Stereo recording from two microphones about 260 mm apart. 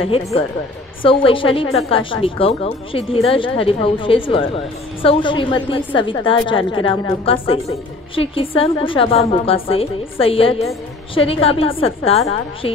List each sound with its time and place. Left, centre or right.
0.0 s a woman's voice: left